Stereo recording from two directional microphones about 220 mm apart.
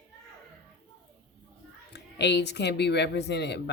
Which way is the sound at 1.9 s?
50° left (ahead or behind).